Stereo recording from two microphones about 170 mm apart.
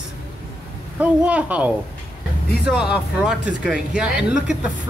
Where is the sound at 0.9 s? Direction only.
10° right (ahead or behind).